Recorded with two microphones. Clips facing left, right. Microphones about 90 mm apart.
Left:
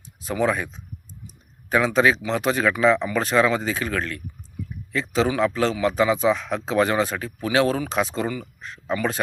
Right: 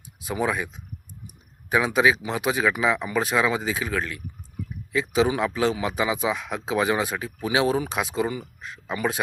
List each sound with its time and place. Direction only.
0.2 s speech: 10° right (ahead or behind)